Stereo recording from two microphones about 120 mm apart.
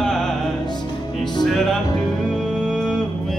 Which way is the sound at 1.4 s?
5° left (ahead or behind).